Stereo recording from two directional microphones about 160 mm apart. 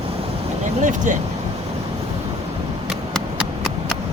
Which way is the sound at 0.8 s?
50° right (ahead or behind).